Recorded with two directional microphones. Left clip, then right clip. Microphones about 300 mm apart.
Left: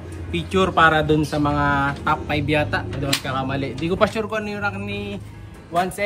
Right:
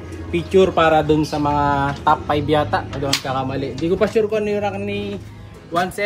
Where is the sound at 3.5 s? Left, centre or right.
Left.